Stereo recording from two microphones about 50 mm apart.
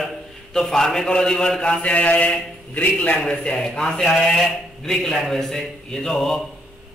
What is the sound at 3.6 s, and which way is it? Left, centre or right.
A man's voice, centre.